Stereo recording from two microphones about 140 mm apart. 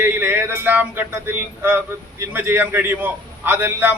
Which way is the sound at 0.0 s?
15° right (ahead or behind).